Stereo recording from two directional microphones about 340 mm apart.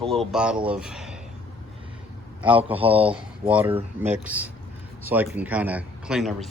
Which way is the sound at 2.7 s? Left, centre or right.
Centre.